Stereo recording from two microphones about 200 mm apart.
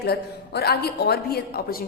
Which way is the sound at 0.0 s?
50° left (ahead or behind).